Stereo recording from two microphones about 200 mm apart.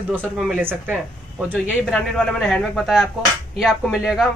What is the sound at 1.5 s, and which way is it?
Speech, 5° left (ahead or behind).